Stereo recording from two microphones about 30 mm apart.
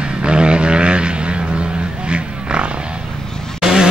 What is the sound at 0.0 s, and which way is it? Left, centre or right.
Vehicle, right.